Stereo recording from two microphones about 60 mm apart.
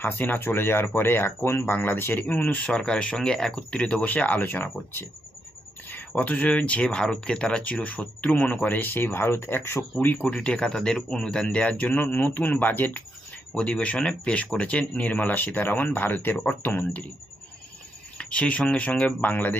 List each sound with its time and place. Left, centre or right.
0.0 s speech: left
4.0 s speech: left
5.9 s speech: left
10.2 s speech: left
18.2 s a sound: centre
18.6 s speech: left